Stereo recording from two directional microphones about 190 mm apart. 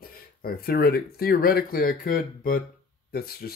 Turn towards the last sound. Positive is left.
turn(degrees=55)  # may be behind; listen again after turning